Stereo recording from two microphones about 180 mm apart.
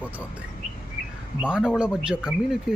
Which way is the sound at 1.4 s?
5° right (ahead or behind).